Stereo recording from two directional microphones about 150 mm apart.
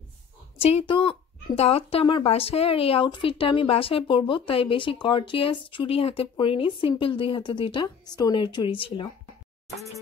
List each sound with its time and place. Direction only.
0.6 s speech: 40° left (ahead or behind)